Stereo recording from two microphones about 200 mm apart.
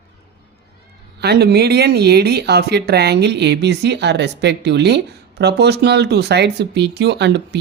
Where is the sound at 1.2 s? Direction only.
55° right (ahead or behind).